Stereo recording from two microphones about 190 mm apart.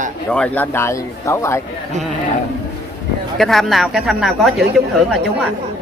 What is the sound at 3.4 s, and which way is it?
Speech, centre (ahead or behind).